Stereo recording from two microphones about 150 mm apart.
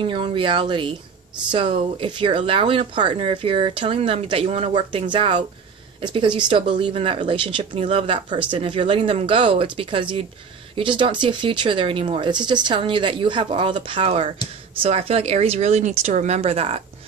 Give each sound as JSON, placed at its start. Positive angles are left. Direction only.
{"t": 0.0, "sound": "speech", "side_deg": -35}